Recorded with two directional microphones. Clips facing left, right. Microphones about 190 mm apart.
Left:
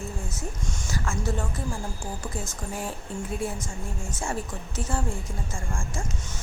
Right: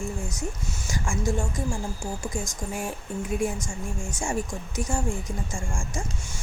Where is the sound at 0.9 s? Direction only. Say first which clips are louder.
Right 2 dB; 15° right (ahead or behind).